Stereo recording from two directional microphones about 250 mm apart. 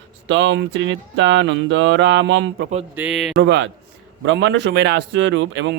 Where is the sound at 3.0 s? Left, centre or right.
Centre.